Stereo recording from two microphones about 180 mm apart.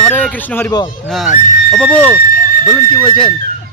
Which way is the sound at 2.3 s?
55° left (ahead or behind).